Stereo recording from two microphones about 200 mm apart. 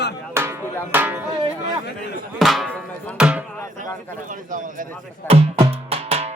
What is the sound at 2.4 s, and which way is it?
Speech, centre (ahead or behind).